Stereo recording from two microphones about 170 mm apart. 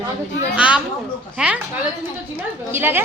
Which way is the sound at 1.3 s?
5° right (ahead or behind).